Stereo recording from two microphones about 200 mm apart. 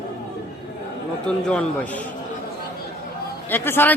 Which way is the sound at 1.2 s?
5° left (ahead or behind).